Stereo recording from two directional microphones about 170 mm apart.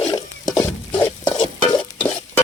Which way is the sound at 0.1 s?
20° left (ahead or behind).